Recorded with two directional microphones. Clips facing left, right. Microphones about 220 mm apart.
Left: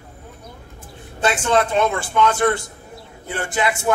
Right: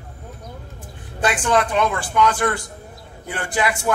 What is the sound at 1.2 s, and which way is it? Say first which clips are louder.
A man's voice: left 1 dB; 25° left (ahead or behind).